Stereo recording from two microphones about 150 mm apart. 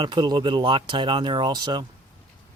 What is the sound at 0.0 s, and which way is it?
Speech, 30° right (ahead or behind).